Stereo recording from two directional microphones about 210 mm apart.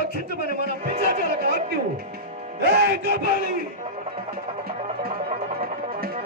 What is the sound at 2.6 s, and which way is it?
Speech, 50° right (ahead or behind).